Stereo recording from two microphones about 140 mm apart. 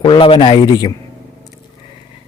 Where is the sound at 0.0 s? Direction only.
40° left (ahead or behind).